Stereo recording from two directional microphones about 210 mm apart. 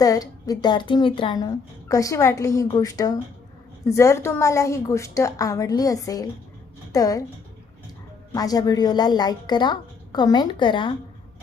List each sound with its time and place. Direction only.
0.0 s a woman's voice: 15° left (ahead or behind)
8.3 s a woman's voice: 15° left (ahead or behind)